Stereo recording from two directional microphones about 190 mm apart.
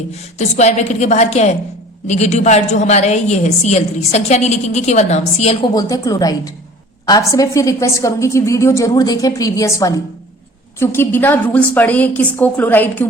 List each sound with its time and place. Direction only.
0.3 s a woman's voice: 35° left (ahead or behind)
5.7 s a woman's voice: 20° left (ahead or behind)